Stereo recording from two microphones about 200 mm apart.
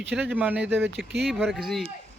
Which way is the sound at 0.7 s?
10° right (ahead or behind).